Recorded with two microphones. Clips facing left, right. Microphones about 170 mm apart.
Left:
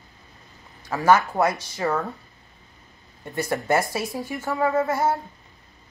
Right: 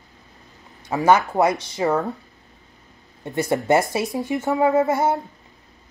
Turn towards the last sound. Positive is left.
turn(degrees=-20)  # may be behind; listen again after turning